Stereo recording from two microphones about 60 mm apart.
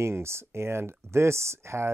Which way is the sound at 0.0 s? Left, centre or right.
Right.